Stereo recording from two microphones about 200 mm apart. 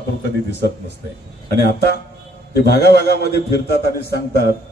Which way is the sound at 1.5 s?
55° left (ahead or behind).